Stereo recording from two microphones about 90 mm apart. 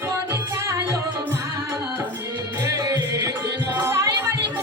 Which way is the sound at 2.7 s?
45° right (ahead or behind).